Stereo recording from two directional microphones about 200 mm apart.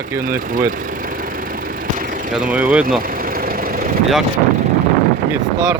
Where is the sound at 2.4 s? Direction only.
5° right (ahead or behind).